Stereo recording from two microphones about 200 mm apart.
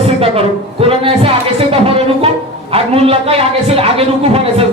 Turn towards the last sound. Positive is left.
turn(degrees=-30)  # may be behind; listen again after turning